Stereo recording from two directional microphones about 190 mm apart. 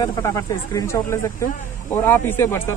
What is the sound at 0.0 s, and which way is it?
Speech, 15° left (ahead or behind).